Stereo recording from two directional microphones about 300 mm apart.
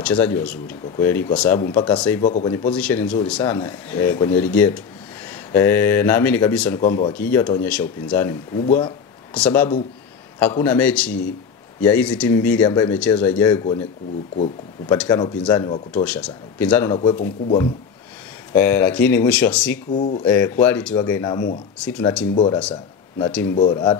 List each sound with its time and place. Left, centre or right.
0.0 s speech: centre
2.2 s speech: left
2.5 s speech: centre
9.3 s speech: centre
14.9 s speech: centre
18.5 s speech: centre
19.9 s speech: left
20.2 s speech: centre
22.3 s speech: centre